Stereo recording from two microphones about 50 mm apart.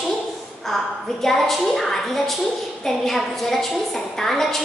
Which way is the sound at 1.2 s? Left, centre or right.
Centre.